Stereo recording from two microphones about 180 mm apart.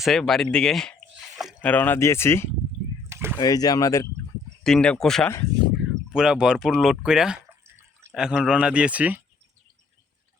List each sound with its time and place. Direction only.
0.0 s speech: centre (ahead or behind)
3.1 s a sound: 15° right (ahead or behind)
3.3 s speech: 20° left (ahead or behind)
4.6 s speech: 5° left (ahead or behind)